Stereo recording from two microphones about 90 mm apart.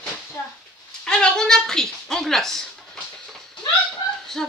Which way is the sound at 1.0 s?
10° left (ahead or behind).